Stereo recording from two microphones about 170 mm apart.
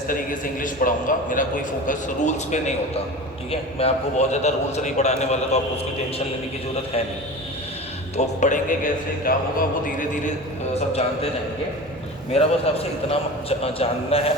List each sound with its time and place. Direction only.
0.1 s a man's voice: 55° left (ahead or behind)
8.1 s a man's voice: 45° left (ahead or behind)
10.8 s a man's voice: 40° left (ahead or behind)
12.3 s a man's voice: 35° left (ahead or behind)